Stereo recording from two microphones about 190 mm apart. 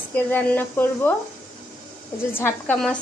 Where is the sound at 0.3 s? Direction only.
10° left (ahead or behind).